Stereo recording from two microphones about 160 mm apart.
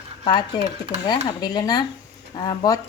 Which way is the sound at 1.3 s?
25° left (ahead or behind).